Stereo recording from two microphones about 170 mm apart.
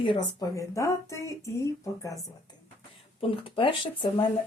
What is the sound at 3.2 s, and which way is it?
Speech, 30° left (ahead or behind).